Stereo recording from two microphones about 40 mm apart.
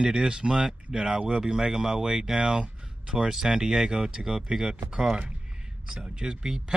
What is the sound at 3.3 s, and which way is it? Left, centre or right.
Speech, centre.